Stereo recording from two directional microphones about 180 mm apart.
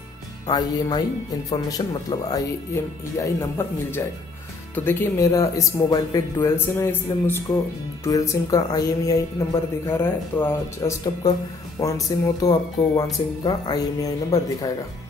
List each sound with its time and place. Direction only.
0.5 s speech: 20° left (ahead or behind)